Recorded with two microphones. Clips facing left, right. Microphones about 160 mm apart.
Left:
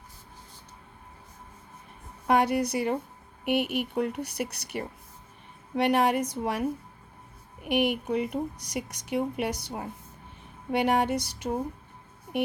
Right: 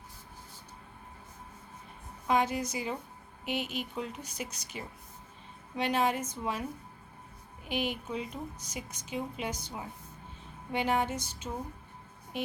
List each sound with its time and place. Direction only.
2.2 s a woman's voice: 65° left (ahead or behind)